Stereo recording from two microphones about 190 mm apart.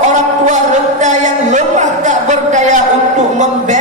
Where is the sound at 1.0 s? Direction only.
40° right (ahead or behind).